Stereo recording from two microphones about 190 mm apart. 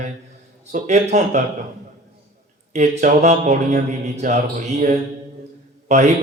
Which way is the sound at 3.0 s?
40° right (ahead or behind).